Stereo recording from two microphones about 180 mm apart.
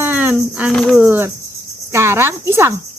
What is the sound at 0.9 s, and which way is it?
Speech, 10° right (ahead or behind).